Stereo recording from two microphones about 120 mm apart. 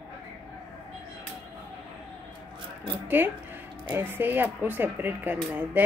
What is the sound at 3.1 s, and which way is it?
A woman's voice, 15° right (ahead or behind).